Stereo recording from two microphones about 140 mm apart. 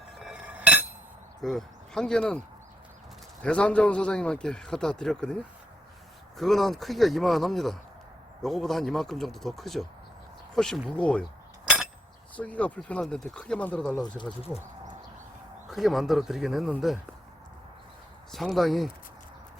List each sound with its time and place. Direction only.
0.3 s cutlery: 10° right (ahead or behind)
1.4 s speech: centre (ahead or behind)
3.4 s a man's voice: 5° left (ahead or behind)
11.6 s a sound: 5° right (ahead or behind)
12.4 s a man's voice: 10° left (ahead or behind)
15.7 s a man's voice: centre (ahead or behind)
18.3 s a man's voice: centre (ahead or behind)